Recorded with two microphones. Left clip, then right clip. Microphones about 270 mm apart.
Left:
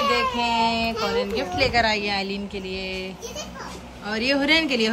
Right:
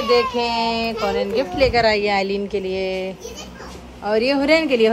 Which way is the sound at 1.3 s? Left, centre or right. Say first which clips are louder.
Right 5 dB; centre.